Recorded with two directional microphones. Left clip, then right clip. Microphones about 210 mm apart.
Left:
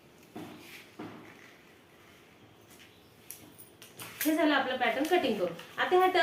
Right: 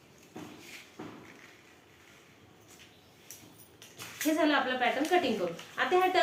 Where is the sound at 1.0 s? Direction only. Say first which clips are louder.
Left 2 dB; 40° left (ahead or behind).